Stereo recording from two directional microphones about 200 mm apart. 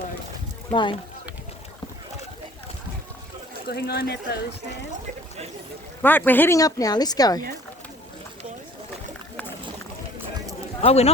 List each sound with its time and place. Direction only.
0.7 s speech: 25° left (ahead or behind)
3.7 s speech: 50° left (ahead or behind)
6.0 s a woman's voice: 10° left (ahead or behind)
10.8 s speech: 30° left (ahead or behind)